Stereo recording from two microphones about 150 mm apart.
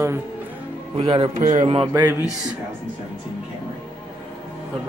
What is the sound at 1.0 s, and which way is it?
Speech, 35° right (ahead or behind).